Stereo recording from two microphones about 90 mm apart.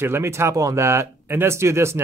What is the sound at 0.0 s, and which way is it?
Speech, 30° right (ahead or behind).